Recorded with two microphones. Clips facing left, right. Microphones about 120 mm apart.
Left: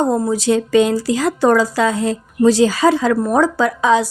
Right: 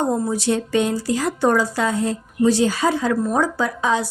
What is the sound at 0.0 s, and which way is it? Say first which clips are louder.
Speech: left 4 dB; 90° left.